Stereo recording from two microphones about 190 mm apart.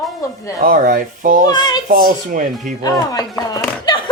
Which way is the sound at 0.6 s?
45° right (ahead or behind).